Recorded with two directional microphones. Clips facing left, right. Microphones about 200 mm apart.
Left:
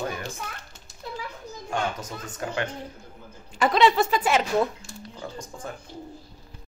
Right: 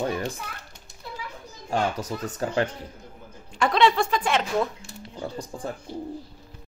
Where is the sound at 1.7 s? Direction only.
35° right (ahead or behind).